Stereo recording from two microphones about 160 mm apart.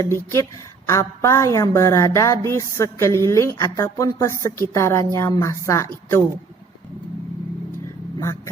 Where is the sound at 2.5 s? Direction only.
20° left (ahead or behind).